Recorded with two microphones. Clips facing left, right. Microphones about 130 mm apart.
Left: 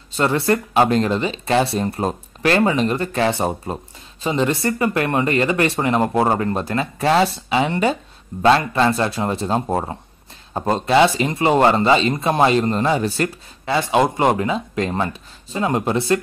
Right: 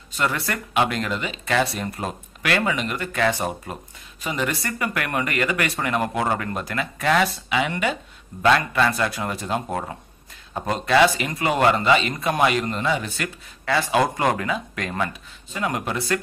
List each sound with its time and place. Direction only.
0.1 s speech: 30° left (ahead or behind)
13.7 s speech: 25° left (ahead or behind)